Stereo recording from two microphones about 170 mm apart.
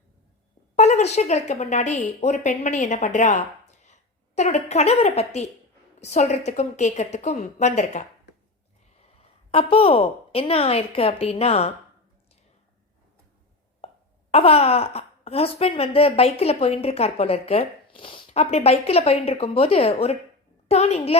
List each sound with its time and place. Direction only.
0.8 s speech: 40° left (ahead or behind)
9.5 s speech: 35° left (ahead or behind)
13.8 s speech: 35° left (ahead or behind)